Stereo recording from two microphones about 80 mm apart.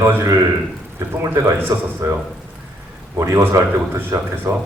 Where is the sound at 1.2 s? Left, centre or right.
Right.